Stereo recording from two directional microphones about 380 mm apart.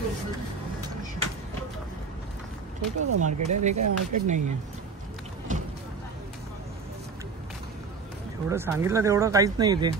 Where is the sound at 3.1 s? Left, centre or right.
Right.